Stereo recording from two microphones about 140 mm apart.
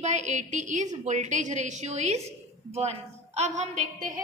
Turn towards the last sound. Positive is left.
turn(degrees=-65)  # may be behind; listen again after turning